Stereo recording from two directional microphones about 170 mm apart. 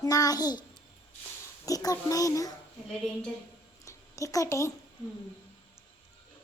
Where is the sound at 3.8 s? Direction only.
20° left (ahead or behind).